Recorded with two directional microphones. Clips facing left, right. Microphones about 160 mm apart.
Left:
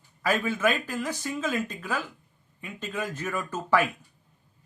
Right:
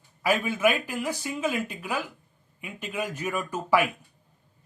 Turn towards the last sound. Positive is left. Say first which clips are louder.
# right 1 dB
turn(degrees=-15)  # may be behind; listen again after turning